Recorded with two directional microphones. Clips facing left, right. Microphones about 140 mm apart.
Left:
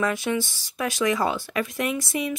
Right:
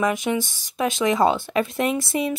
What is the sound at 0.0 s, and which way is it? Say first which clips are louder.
Speech: right 2 dB; 20° right (ahead or behind).